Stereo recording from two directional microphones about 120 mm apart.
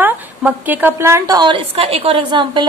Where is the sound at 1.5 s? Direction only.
55° right (ahead or behind).